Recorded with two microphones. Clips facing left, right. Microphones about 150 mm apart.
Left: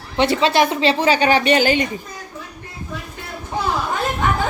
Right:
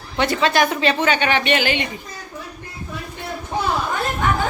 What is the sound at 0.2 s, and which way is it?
A woman's voice, 25° left (ahead or behind).